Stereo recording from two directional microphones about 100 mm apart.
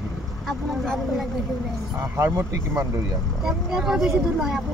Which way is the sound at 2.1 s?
25° right (ahead or behind).